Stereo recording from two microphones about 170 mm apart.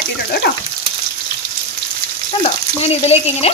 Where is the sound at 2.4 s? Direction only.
40° left (ahead or behind).